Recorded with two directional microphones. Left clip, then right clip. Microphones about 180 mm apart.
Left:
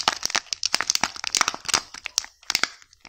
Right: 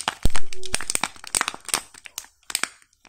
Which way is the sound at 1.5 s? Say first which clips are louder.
Left 4 dB; centre (ahead or behind).